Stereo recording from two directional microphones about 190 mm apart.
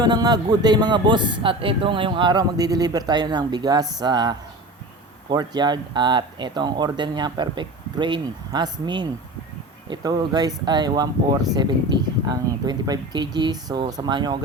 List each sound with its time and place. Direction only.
0.0 s speech: 20° right (ahead or behind)